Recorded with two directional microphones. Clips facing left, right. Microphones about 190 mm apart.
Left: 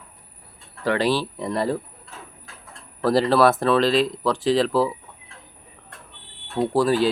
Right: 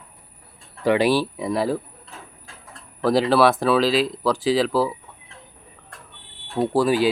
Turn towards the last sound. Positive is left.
turn(degrees=-5)  # may be behind; listen again after turning